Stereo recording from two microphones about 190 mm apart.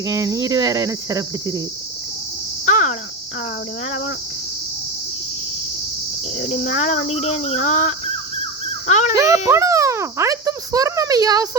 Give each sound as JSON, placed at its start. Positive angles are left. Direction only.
{"t": 0.0, "sound": "a child's voice", "side_deg": -15}
{"t": 2.6, "sound": "cricket", "side_deg": 40}
{"t": 6.4, "sound": "cricket", "side_deg": 40}
{"t": 9.1, "sound": "a child's voice", "side_deg": -15}